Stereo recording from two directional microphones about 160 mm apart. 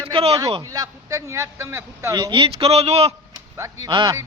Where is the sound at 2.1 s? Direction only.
30° right (ahead or behind).